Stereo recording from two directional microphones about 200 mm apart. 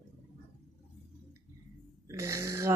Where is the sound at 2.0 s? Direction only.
15° right (ahead or behind).